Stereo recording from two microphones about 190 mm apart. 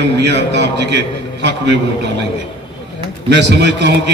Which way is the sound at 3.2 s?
65° right (ahead or behind).